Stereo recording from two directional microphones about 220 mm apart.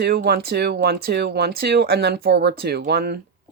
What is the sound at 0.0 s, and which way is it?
Speech, 45° right (ahead or behind).